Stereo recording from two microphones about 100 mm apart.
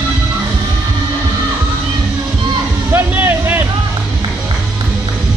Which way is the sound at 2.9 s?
25° right (ahead or behind).